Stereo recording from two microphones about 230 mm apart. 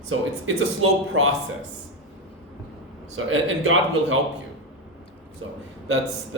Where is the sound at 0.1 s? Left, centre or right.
Right.